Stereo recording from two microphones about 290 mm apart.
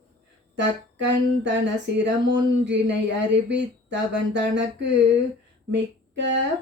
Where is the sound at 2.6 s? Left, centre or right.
Right.